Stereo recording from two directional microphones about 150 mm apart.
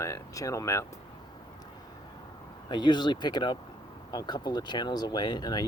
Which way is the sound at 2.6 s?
30° left (ahead or behind).